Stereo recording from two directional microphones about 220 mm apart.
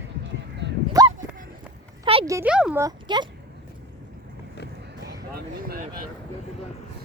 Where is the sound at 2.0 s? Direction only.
20° right (ahead or behind).